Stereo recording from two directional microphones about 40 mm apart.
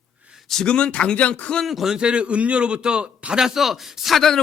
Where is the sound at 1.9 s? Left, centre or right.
Right.